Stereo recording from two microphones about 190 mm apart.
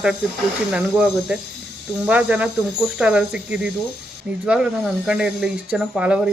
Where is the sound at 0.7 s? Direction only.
5° right (ahead or behind).